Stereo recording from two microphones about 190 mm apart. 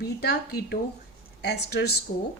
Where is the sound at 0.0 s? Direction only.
55° left (ahead or behind).